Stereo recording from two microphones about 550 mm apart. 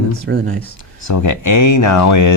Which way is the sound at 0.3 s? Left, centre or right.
Centre.